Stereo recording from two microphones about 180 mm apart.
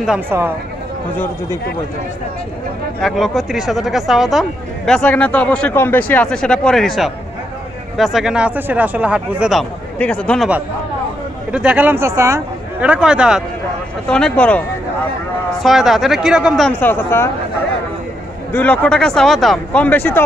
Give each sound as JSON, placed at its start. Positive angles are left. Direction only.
{"t": 0.0, "sound": "speech", "side_deg": -5}
{"t": 1.1, "sound": "speech", "side_deg": 10}
{"t": 3.0, "sound": "speech", "side_deg": 0}
{"t": 11.5, "sound": "speech", "side_deg": -5}
{"t": 15.6, "sound": "speech", "side_deg": 0}
{"t": 18.5, "sound": "speech", "side_deg": 10}